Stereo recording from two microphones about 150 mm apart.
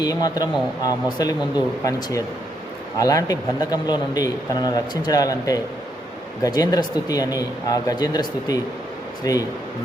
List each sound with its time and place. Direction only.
0.0 s speech: 25° left (ahead or behind)